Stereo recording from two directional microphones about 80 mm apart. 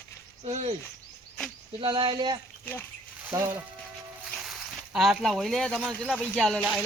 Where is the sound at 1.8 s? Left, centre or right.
Right.